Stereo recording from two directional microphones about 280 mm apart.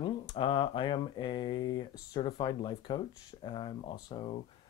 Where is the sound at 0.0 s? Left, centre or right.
Centre.